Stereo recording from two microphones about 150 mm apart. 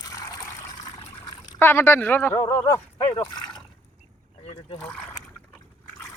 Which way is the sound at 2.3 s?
25° left (ahead or behind).